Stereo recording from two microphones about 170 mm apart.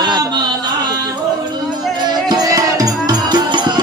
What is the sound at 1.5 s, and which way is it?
Music, 25° right (ahead or behind).